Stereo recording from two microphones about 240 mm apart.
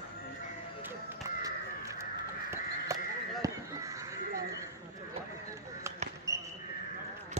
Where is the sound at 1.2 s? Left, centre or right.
Centre.